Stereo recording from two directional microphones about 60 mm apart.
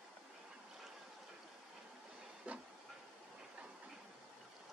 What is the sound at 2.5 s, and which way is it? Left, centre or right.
Train, right.